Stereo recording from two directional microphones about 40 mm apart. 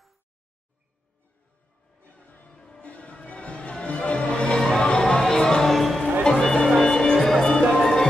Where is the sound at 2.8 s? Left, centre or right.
Left; by 5.7 s centre.